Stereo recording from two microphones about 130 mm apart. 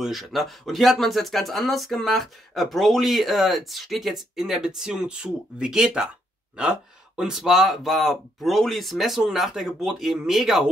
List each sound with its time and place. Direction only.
0.0 s speech: centre (ahead or behind)